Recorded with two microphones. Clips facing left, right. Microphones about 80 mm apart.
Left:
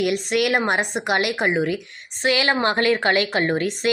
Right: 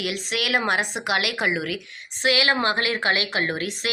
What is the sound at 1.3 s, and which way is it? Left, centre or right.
A woman's voice, left.